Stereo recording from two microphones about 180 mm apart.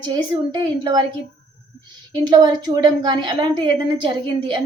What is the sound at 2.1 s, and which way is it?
A woman's voice, 20° right (ahead or behind).